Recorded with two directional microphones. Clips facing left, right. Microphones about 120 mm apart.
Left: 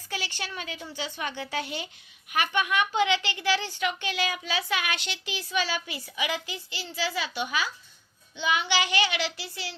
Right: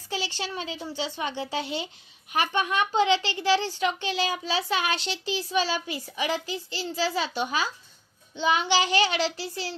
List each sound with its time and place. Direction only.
0.1 s speech: 25° right (ahead or behind)